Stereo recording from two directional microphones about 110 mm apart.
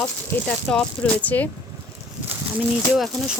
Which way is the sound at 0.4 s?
5° left (ahead or behind).